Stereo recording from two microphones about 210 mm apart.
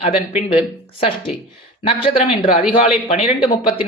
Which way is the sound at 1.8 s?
25° left (ahead or behind).